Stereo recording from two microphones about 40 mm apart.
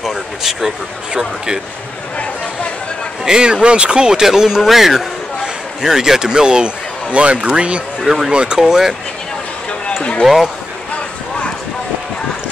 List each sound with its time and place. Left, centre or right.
0.0 s a sound: centre
1.1 s speech: centre
3.3 s a man's voice: centre
8.5 s speech: centre
10.2 s speech: centre